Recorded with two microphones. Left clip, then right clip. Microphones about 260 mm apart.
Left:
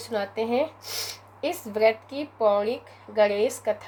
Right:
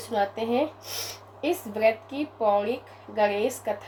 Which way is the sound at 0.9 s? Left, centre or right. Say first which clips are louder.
Left 2 dB; left.